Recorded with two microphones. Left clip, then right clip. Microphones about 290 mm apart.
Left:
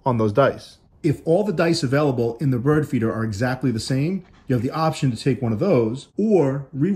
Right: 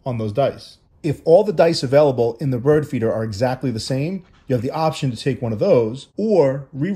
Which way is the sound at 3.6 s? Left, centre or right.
Centre.